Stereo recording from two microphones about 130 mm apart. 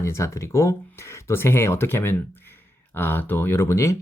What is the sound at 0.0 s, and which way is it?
Speech, 25° left (ahead or behind).